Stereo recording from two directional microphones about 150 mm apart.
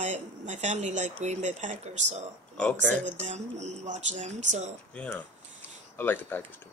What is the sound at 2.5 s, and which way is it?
Speech, 10° left (ahead or behind).